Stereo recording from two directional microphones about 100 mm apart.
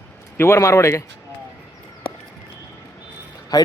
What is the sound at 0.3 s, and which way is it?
Speech, 25° left (ahead or behind).